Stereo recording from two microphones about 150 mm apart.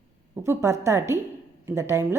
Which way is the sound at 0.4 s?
20° right (ahead or behind).